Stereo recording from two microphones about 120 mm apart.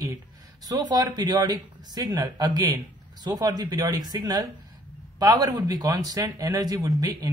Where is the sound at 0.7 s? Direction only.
35° right (ahead or behind).